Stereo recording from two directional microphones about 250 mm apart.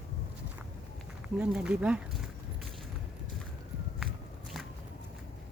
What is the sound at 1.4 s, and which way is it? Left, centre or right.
Speech, centre.